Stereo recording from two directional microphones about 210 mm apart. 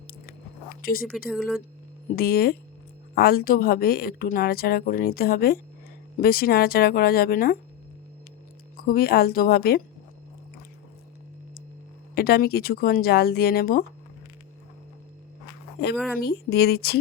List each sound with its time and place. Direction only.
0.1 s biting: 45° left (ahead or behind)
1.3 s speech: centre (ahead or behind)
2.1 s a woman's voice: 45° left (ahead or behind)
8.7 s a woman's voice: 45° left (ahead or behind)
12.1 s a woman's voice: 45° left (ahead or behind)
16.2 s a woman's voice: 50° left (ahead or behind)